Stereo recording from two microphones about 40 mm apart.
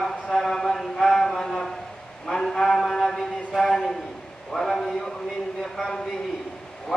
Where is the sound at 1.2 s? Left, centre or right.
Centre.